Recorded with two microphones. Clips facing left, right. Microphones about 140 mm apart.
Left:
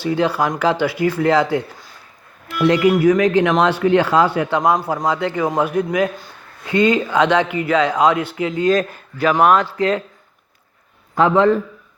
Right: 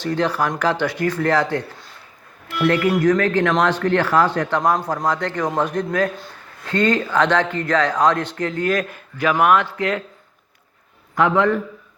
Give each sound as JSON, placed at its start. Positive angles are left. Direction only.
{"t": 0.0, "sound": "speech", "side_deg": 10}
{"t": 8.6, "sound": "a man's voice", "side_deg": 25}
{"t": 11.1, "sound": "a man's voice", "side_deg": 30}